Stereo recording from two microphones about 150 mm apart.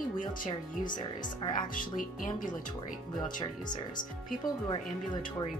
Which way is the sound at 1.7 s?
65° left (ahead or behind).